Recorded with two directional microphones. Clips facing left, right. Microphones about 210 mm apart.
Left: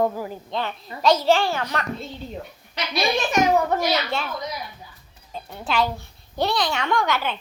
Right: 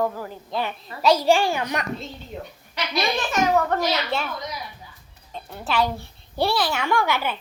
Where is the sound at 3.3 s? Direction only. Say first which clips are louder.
Left 1 dB; 15° left (ahead or behind).